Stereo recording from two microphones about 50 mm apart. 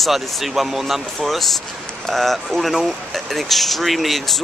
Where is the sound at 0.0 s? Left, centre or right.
Centre.